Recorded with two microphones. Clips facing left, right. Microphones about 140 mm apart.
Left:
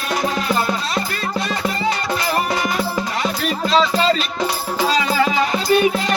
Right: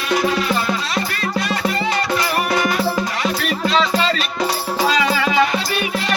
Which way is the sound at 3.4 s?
35° left (ahead or behind).